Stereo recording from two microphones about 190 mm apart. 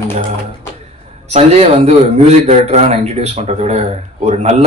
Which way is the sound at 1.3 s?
35° right (ahead or behind).